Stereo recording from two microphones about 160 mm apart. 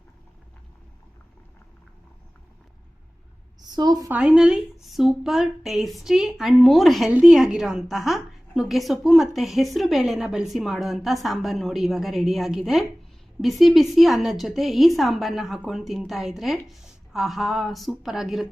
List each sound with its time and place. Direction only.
3.7 s a woman's voice: 25° right (ahead or behind)
4.1 s a woman's voice: 5° right (ahead or behind)